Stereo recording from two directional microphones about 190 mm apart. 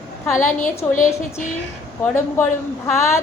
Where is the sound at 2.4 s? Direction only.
15° left (ahead or behind).